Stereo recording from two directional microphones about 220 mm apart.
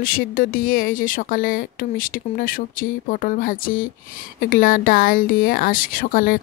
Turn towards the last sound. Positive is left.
turn(degrees=40)  # may be behind; listen again after turning